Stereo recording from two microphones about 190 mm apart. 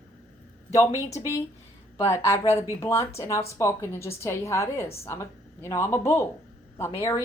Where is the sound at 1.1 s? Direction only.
15° left (ahead or behind).